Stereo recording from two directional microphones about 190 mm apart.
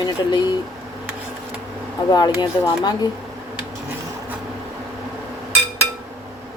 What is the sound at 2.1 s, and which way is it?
Speech, 20° left (ahead or behind).